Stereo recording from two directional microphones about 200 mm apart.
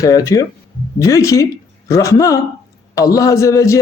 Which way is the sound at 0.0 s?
15° left (ahead or behind).